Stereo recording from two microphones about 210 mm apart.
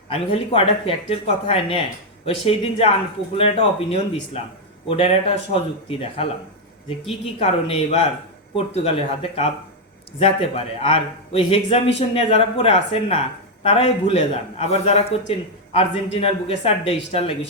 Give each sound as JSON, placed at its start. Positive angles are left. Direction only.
{"t": 0.1, "sound": "a man's voice", "side_deg": 25}
{"t": 7.3, "sound": "a man's voice", "side_deg": 30}